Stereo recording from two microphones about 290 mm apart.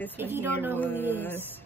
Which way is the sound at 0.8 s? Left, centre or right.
Centre.